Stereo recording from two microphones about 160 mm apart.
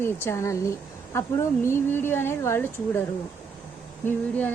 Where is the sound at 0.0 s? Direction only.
15° left (ahead or behind).